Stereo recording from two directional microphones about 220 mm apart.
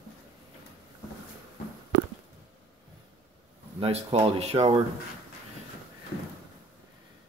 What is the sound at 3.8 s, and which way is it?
Speech, 25° right (ahead or behind).